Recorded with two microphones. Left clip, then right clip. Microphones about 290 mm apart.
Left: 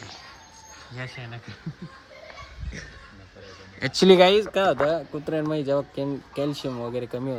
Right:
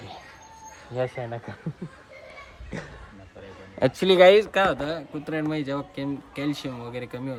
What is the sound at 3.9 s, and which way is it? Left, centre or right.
Speech, left.